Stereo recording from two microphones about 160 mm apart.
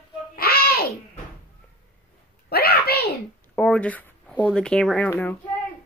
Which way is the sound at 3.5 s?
5° left (ahead or behind).